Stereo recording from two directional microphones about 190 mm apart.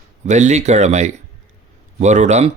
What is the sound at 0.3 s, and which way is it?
Speech, 40° right (ahead or behind).